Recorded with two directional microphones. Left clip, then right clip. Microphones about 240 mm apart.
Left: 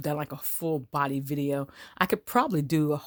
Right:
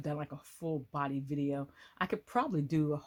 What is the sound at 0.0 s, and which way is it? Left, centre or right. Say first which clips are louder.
Speech: left 8 dB; left.